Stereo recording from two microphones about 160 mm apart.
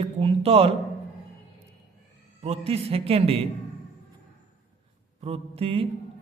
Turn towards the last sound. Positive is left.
turn(degrees=-35)  # may be behind; listen again after turning